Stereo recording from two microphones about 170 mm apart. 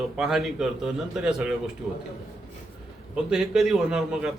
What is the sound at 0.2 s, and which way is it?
A man's voice, centre (ahead or behind).